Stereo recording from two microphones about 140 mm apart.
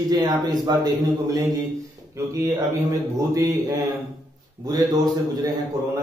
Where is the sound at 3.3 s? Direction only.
25° right (ahead or behind).